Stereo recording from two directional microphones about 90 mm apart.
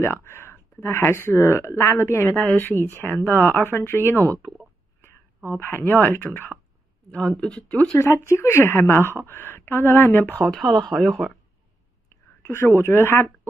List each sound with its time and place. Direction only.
0.0 s a woman's voice: 30° left (ahead or behind)
5.5 s a woman's voice: 25° left (ahead or behind)
7.1 s speech: 10° left (ahead or behind)
8.0 s a woman's voice: 30° left (ahead or behind)
10.5 s speech: 5° left (ahead or behind)
12.1 s speech: 30° left (ahead or behind)